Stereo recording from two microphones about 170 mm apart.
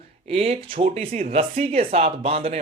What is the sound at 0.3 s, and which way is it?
Speech, 35° right (ahead or behind).